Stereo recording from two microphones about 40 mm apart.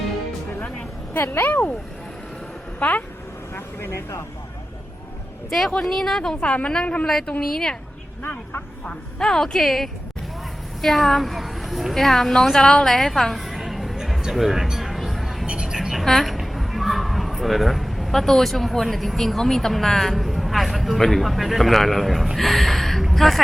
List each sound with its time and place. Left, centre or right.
1.1 s speech: left
2.7 s speech: left
3.5 s speech: left
5.5 s a man's voice: centre
6.4 s a woman's voice: left
7.0 s a woman's voice: centre
8.9 s a woman's voice: centre
14.3 s a sound: centre
15.4 s a sound: right
16.0 s a man's voice: centre